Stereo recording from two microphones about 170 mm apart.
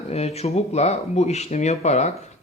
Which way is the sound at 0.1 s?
40° left (ahead or behind).